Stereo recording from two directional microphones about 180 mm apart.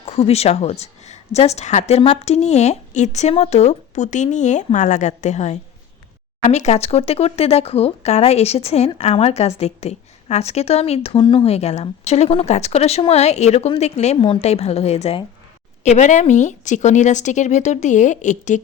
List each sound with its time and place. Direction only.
0.0 s a woman's voice: 35° left (ahead or behind)